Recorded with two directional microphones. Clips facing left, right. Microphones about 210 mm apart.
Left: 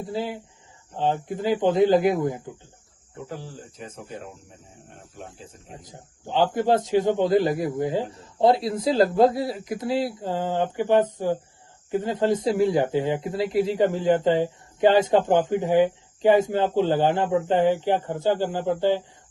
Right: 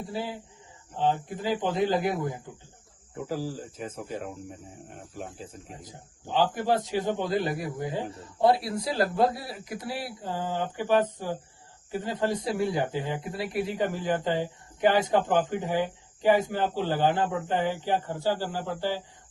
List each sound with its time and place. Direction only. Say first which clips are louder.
0.0 s speech: left 4 dB; 20° left (ahead or behind)
5.8 s speech: left 3 dB; 20° left (ahead or behind)